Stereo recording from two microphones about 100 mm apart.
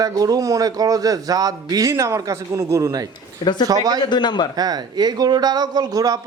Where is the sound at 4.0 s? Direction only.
50° left (ahead or behind).